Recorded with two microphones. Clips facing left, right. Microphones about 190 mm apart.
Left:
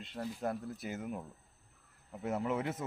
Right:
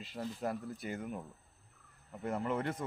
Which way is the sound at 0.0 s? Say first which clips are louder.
Left 1 dB; centre (ahead or behind).